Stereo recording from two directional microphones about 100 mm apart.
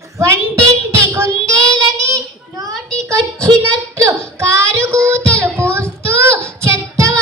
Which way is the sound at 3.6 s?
30° right (ahead or behind).